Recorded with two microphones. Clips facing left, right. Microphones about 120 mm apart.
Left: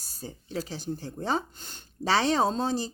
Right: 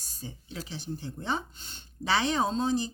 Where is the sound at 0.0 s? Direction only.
40° left (ahead or behind).